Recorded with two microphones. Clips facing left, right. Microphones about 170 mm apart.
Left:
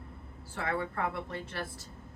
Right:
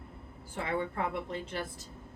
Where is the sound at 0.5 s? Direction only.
20° right (ahead or behind).